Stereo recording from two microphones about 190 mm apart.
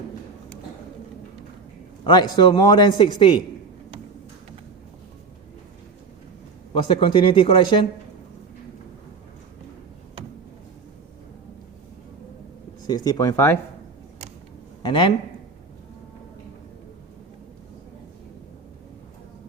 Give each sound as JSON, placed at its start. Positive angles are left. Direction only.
{"t": 2.0, "sound": "a man's voice", "side_deg": 25}
{"t": 6.8, "sound": "a man's voice", "side_deg": 30}
{"t": 12.9, "sound": "a man's voice", "side_deg": 20}
{"t": 14.8, "sound": "speech", "side_deg": 25}